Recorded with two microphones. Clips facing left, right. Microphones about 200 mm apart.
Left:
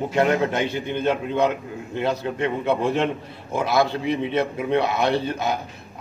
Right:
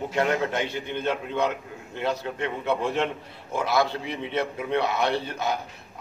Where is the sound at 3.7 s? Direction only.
15° left (ahead or behind).